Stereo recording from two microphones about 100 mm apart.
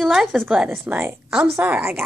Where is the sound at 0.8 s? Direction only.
25° right (ahead or behind).